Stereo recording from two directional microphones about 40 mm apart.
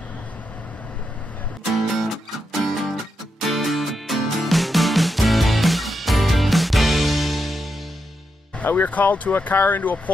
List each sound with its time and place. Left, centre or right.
1.6 s music: centre
8.6 s speech: left